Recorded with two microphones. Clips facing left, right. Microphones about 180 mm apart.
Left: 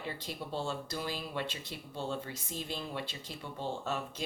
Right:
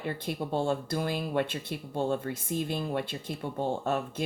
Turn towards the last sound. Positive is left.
turn(degrees=-50)  # may be behind; listen again after turning